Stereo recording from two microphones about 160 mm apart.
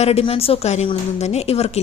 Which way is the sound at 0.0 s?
40° left (ahead or behind).